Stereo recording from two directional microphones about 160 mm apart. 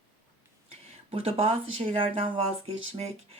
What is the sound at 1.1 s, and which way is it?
Speech, 35° right (ahead or behind).